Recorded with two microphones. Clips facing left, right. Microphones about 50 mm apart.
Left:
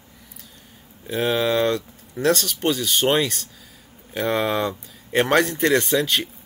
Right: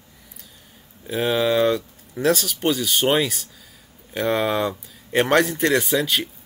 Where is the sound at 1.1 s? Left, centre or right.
Centre.